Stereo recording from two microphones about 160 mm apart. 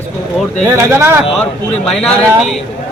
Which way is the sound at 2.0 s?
5° left (ahead or behind).